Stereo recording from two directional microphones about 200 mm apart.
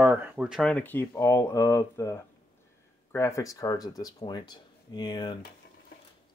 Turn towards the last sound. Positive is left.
turn(degrees=20)  # may be behind; listen again after turning